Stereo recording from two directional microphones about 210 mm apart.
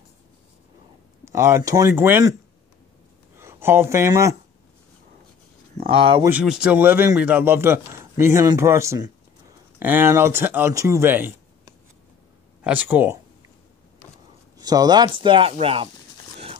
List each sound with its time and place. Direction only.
1.2 s a man's voice: 15° right (ahead or behind)
3.3 s speech: 10° right (ahead or behind)
5.8 s speech: 25° right (ahead or behind)
6.2 s a man's voice: 5° right (ahead or behind)
14.6 s speech: 20° right (ahead or behind)